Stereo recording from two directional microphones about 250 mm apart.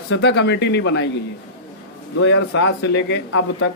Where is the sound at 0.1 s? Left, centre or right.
Left.